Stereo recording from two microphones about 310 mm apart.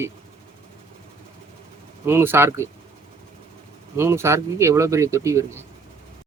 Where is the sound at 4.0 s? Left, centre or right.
Centre.